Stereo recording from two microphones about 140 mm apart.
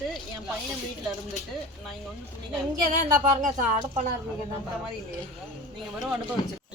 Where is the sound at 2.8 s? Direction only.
70° right (ahead or behind).